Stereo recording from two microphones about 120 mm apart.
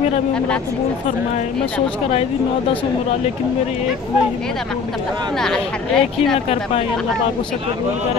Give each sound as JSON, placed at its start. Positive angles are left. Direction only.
{"t": 5.4, "sound": "a woman's voice", "side_deg": 5}
{"t": 6.3, "sound": "speech", "side_deg": 55}